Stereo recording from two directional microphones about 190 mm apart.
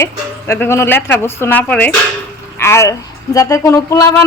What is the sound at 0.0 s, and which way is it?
A woman's voice, 15° left (ahead or behind).